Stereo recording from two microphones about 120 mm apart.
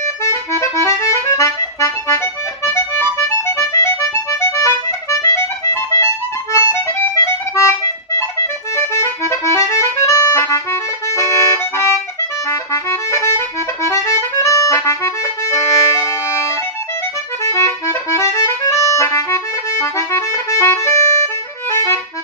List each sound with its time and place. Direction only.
0.2 s accordion: 25° left (ahead or behind)
5.2 s music: 25° left (ahead or behind)
6.5 s accordion: 25° left (ahead or behind)
8.7 s accordion: 25° left (ahead or behind)